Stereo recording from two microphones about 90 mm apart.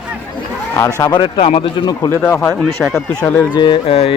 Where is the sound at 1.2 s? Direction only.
65° left (ahead or behind); by 1.8 s 85° left.